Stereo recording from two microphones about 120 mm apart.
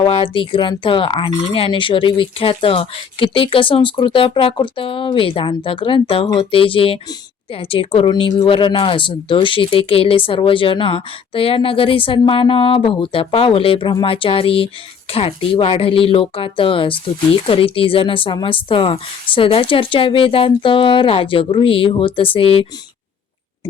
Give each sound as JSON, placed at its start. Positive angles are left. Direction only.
{"t": 0.0, "sound": "speech", "side_deg": 45}